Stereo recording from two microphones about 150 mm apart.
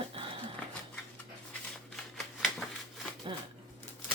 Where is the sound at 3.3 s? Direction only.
30° right (ahead or behind).